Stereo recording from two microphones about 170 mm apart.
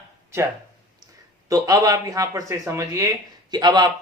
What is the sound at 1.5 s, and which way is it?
Speech, 20° right (ahead or behind).